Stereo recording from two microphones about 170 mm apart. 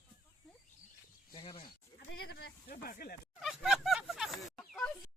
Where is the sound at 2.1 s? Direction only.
70° left (ahead or behind).